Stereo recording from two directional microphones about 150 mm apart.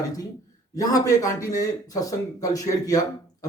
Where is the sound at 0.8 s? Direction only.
20° left (ahead or behind).